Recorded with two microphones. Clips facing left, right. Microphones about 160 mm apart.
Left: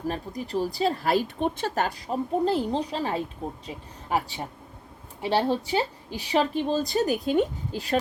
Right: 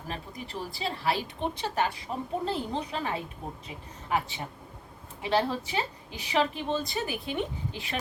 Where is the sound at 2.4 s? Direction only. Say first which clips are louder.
Left 7 dB; 35° left (ahead or behind).